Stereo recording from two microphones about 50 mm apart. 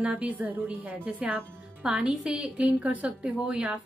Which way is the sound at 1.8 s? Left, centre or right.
Right.